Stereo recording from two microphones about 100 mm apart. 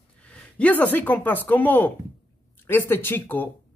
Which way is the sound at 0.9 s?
15° left (ahead or behind).